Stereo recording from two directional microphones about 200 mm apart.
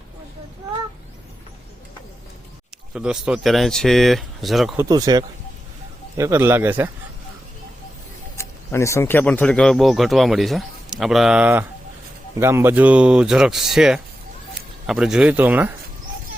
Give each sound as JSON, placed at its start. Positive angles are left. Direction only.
{"t": 2.9, "sound": "speech", "side_deg": -5}
{"t": 4.8, "sound": "speech", "side_deg": -20}
{"t": 8.4, "sound": "speech", "side_deg": 15}